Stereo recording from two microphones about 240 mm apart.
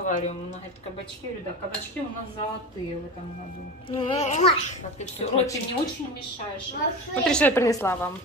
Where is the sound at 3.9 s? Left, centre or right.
Left.